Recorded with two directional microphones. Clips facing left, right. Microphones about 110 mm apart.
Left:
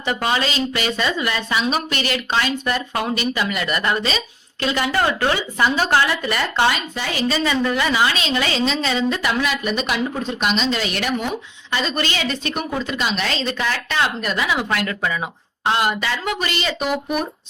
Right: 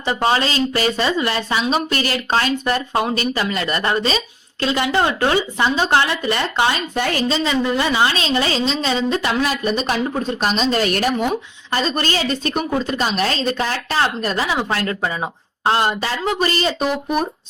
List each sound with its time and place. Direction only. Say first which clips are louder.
0.0 s a woman's voice: right 3 dB; 30° right (ahead or behind)
6.9 s a woman's voice: right 4 dB; 55° right (ahead or behind)
7.3 s a woman's voice: right 1 dB; 20° right (ahead or behind)